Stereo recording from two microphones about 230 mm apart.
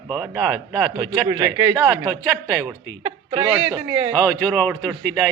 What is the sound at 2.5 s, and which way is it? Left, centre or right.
Speech, centre.